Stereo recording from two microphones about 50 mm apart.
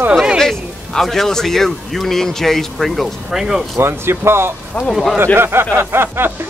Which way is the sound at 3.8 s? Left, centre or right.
Right.